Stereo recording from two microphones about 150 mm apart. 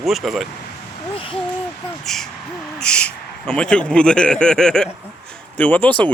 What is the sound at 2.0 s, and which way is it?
Speech, centre (ahead or behind).